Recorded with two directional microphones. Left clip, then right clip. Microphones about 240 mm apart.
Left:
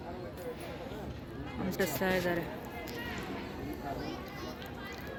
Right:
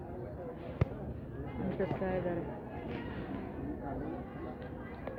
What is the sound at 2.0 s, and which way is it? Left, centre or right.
Speech, left.